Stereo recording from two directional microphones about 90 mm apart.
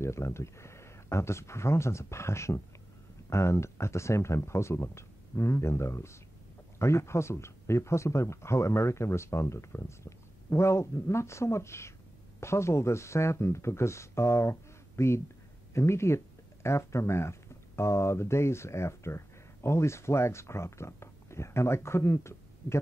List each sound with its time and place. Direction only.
0.0 s speech: 30° left (ahead or behind)